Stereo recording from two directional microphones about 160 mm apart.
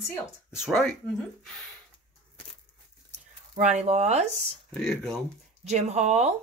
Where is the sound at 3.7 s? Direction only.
45° right (ahead or behind).